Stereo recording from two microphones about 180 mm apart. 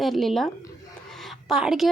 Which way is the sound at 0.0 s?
Centre (ahead or behind).